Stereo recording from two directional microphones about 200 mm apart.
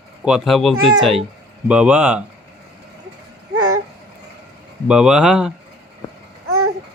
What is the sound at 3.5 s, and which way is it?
Babbling, 90° right.